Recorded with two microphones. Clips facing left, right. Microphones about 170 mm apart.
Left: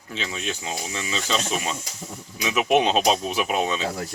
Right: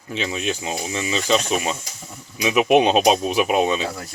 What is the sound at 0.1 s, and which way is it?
Speech, 15° right (ahead or behind).